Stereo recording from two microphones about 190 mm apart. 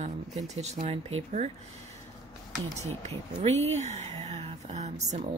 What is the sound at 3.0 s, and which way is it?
Speech, 35° right (ahead or behind).